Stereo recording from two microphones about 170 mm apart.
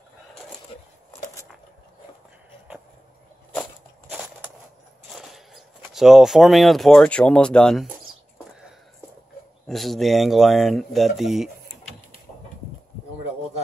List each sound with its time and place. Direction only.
0.7 s a sound: 35° left (ahead or behind)
5.1 s speech: centre (ahead or behind)
9.7 s speech: centre (ahead or behind)